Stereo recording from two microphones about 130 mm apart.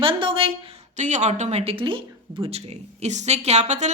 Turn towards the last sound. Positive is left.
turn(degrees=-60)  # may be behind; listen again after turning